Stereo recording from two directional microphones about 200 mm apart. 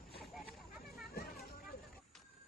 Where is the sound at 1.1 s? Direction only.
50° left (ahead or behind).